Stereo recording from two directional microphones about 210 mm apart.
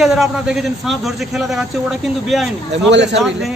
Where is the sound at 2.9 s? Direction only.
55° right (ahead or behind).